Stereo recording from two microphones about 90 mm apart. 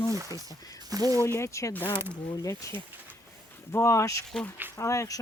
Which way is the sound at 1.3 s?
30° left (ahead or behind).